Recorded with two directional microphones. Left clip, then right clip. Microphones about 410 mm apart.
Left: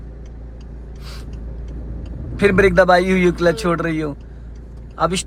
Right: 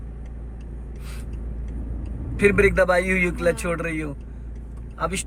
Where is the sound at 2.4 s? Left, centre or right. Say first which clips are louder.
Left 5 dB; centre.